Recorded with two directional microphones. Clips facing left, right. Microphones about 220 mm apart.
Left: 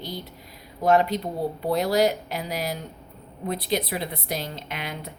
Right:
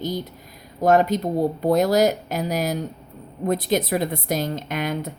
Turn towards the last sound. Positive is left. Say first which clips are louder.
# right 8 dB
turn(degrees=-45)  # may be behind; listen again after turning